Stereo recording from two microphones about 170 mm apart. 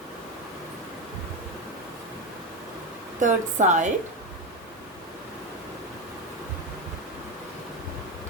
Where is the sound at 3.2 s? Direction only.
45° right (ahead or behind).